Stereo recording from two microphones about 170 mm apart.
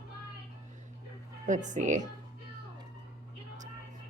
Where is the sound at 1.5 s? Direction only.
45° right (ahead or behind).